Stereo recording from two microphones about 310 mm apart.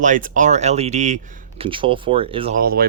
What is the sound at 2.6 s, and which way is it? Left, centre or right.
Speech, right.